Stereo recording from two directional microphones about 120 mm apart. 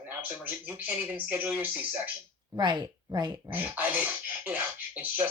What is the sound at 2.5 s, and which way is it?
Speech, 35° right (ahead or behind).